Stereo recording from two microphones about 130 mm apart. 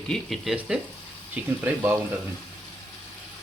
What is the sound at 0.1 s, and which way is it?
Speech, centre (ahead or behind).